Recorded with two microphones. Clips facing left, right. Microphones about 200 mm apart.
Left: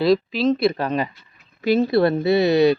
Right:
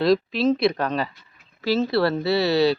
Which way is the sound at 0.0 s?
Centre (ahead or behind).